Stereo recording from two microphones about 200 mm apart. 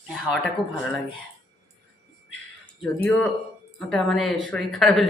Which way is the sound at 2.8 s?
Centre (ahead or behind).